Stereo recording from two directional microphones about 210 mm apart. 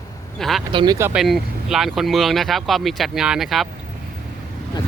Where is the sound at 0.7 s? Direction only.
20° right (ahead or behind).